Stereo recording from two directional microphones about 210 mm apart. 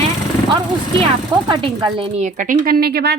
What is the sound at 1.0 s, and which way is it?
Speech, 25° right (ahead or behind).